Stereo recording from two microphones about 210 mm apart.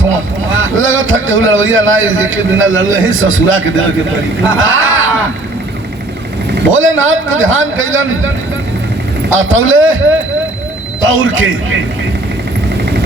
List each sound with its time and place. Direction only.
0.0 s speech: 70° right (ahead or behind)
6.5 s speech: 60° right (ahead or behind)
9.3 s speech: 70° right (ahead or behind)